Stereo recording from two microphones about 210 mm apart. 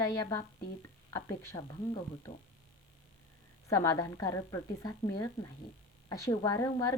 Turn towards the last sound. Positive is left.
turn(degrees=15)  # may be behind; listen again after turning